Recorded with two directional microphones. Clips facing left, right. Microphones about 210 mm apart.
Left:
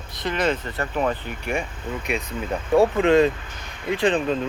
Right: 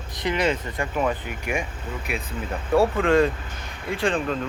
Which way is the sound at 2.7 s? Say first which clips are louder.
Left 2 dB; 20° left (ahead or behind).